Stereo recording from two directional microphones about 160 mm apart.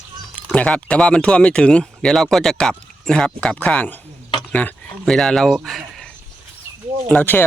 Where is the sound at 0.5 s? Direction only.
10° left (ahead or behind).